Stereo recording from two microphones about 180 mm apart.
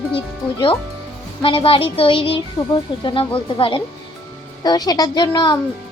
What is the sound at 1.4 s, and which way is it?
A child's voice, 30° left (ahead or behind).